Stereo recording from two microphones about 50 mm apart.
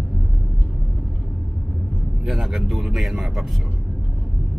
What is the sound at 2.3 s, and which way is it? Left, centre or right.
Speech, centre.